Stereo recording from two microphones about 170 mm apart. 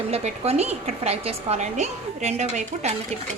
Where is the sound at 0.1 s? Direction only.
40° right (ahead or behind).